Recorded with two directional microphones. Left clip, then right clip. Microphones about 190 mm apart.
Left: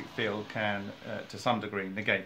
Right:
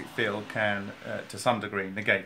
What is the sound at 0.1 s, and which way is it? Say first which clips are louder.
Speech: right 4 dB; 15° right (ahead or behind).